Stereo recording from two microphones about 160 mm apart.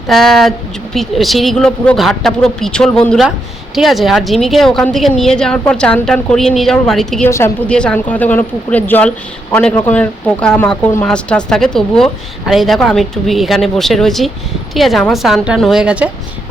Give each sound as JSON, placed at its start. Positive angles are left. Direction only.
{"t": 0.1, "sound": "speech", "side_deg": 0}
{"t": 7.3, "sound": "a woman's voice", "side_deg": 15}
{"t": 7.7, "sound": "speech", "side_deg": 5}